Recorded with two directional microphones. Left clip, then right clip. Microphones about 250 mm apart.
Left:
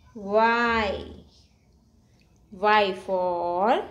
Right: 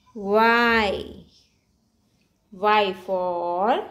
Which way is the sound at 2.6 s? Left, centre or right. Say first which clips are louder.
Right 1 dB; centre.